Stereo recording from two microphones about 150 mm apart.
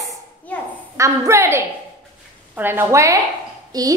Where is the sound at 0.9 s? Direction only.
20° right (ahead or behind).